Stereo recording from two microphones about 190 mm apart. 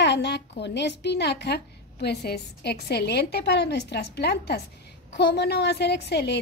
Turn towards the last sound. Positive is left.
turn(degrees=60)  # may be behind; listen again after turning